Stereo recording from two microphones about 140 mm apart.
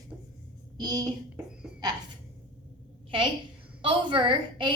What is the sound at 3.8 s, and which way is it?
Speech, 35° right (ahead or behind).